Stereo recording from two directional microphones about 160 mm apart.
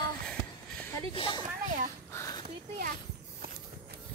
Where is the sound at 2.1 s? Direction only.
20° left (ahead or behind).